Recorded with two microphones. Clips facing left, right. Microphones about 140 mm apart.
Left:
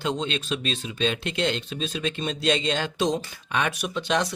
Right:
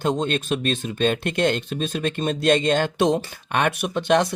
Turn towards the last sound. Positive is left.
turn(degrees=-55)  # may be behind; listen again after turning